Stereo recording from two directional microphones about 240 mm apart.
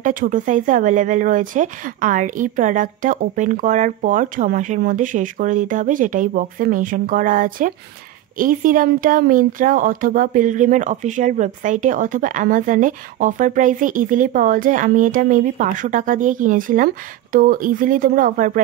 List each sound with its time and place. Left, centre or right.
0.0 s speech: right